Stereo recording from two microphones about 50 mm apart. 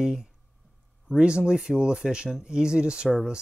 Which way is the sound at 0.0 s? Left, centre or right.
Centre.